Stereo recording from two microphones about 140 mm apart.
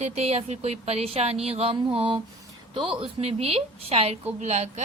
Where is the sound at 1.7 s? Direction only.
40° right (ahead or behind).